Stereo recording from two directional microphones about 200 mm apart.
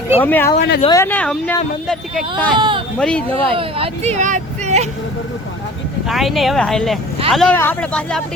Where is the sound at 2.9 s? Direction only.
5° left (ahead or behind).